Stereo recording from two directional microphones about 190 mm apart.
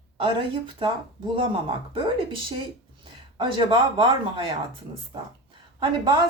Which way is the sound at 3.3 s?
25° right (ahead or behind).